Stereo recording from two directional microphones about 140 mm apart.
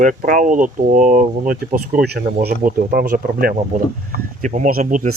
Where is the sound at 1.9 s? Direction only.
85° right.